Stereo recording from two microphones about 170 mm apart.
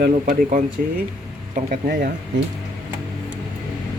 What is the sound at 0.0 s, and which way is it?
Speech, 50° right (ahead or behind).